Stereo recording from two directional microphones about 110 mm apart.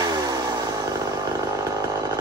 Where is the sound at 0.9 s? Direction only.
30° right (ahead or behind).